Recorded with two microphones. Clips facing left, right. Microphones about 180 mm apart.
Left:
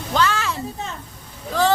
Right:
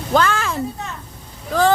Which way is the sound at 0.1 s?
50° right (ahead or behind).